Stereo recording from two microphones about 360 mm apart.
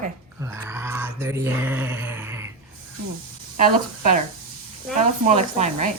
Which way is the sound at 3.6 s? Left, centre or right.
Right.